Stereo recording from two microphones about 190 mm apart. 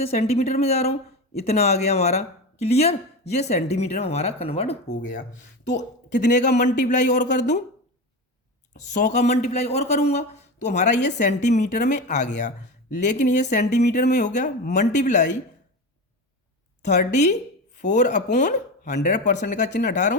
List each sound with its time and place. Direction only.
0.1 s speech: 35° left (ahead or behind)
9.1 s speech: 35° left (ahead or behind)
16.8 s speech: 40° left (ahead or behind)
17.7 s chopping: 40° left (ahead or behind)
19.0 s speech: 40° left (ahead or behind)